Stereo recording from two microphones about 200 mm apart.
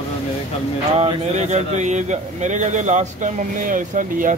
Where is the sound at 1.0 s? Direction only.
35° right (ahead or behind).